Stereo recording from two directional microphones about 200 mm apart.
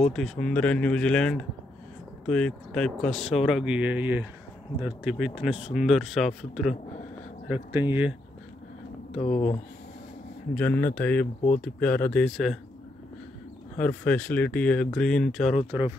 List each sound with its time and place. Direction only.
0.1 s speech: centre (ahead or behind)
9.2 s speech: 35° left (ahead or behind)
10.5 s speech: 10° left (ahead or behind)
13.7 s speech: 10° left (ahead or behind)